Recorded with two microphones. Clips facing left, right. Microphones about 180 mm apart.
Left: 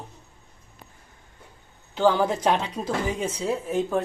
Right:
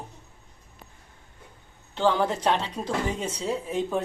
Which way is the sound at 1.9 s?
5° left (ahead or behind).